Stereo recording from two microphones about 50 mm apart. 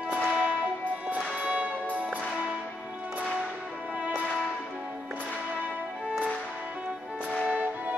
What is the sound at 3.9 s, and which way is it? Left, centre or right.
Music, right.